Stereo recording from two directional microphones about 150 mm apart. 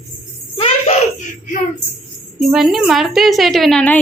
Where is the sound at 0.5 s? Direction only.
40° left (ahead or behind).